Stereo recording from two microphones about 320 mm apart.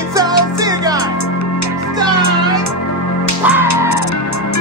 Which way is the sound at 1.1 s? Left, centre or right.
Left.